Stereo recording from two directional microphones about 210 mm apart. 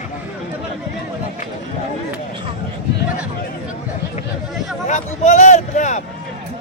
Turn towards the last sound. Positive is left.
turn(degrees=35)  # may be behind; listen again after turning